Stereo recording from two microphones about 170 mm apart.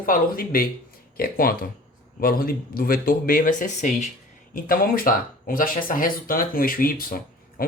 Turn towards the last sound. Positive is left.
turn(degrees=60)  # may be behind; listen again after turning